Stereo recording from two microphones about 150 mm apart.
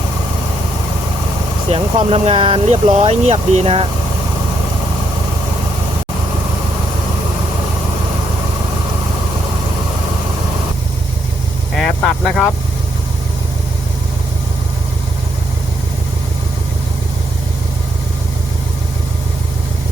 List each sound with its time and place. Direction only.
1.7 s speech: 40° right (ahead or behind)
11.8 s vehicle: centre (ahead or behind)